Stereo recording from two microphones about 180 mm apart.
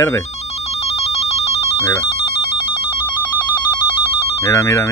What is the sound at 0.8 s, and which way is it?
Music, 35° left (ahead or behind).